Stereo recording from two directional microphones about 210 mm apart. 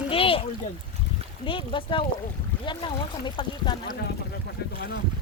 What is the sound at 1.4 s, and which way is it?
Speech, 25° left (ahead or behind).